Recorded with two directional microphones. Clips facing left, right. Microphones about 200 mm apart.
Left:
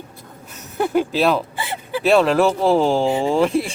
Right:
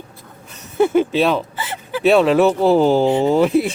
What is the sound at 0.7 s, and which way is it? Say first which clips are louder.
Speech: right 4 dB; centre (ahead or behind).